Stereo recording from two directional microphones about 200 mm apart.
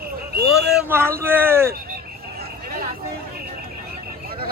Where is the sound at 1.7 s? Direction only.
50° right (ahead or behind).